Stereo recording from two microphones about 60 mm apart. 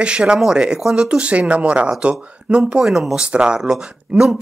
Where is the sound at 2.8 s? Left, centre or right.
Centre.